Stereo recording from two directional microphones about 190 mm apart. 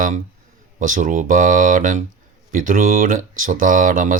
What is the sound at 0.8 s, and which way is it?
Speech, 45° right (ahead or behind).